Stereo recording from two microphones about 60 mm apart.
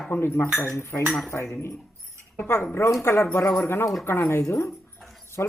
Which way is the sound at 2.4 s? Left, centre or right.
Left.